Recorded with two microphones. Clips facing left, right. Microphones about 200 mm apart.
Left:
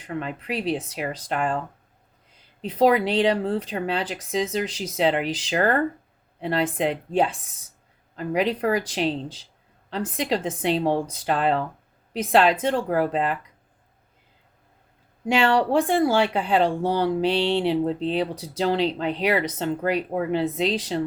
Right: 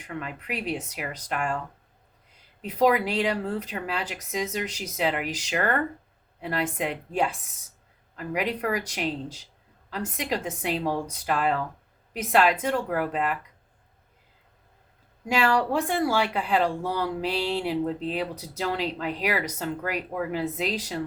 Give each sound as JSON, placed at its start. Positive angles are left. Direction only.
{"t": 0.1, "sound": "speech", "side_deg": 30}
{"t": 15.3, "sound": "speech", "side_deg": 30}